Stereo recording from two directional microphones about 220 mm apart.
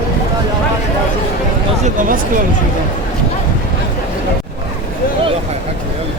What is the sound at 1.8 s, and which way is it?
Speech, 40° right (ahead or behind).